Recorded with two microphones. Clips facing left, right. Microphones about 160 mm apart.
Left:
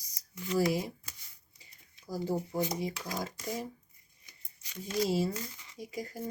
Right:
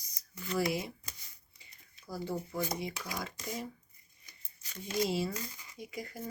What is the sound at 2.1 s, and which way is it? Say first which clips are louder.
Speech: left 4 dB; 40° left (ahead or behind).